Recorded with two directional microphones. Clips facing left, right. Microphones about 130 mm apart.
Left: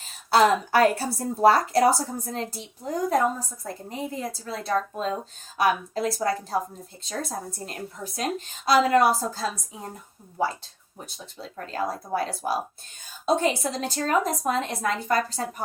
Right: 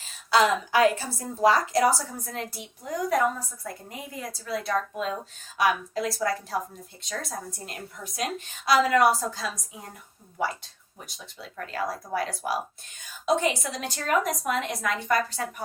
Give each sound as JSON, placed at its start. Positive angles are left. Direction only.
{"t": 0.3, "sound": "a woman's voice", "side_deg": 45}